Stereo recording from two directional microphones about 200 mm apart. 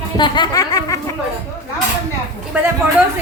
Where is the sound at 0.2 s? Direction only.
20° left (ahead or behind).